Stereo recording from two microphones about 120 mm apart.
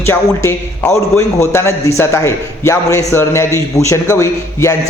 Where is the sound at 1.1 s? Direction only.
20° left (ahead or behind).